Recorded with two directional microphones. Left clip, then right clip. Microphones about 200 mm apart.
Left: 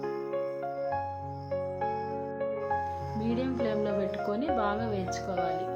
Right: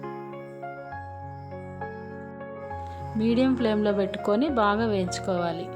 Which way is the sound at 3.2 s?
55° right (ahead or behind).